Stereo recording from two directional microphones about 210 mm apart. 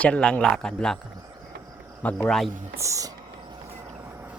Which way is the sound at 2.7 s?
15° right (ahead or behind).